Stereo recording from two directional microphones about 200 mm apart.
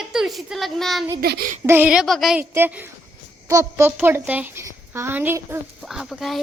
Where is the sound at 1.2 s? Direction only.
50° right (ahead or behind).